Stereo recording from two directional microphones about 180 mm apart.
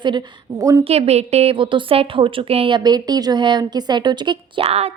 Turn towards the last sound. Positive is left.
turn(degrees=-35)  # may be behind; listen again after turning